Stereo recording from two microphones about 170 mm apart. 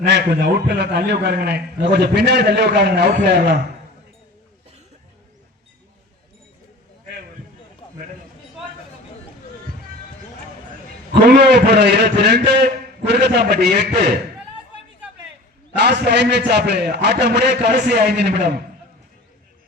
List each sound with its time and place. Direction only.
0.0 s a man's voice: 85° right
11.1 s a man's voice: 75° right (ahead or behind)
15.7 s a man's voice: 80° right